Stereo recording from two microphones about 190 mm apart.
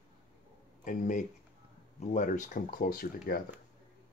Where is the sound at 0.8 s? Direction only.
40° left (ahead or behind).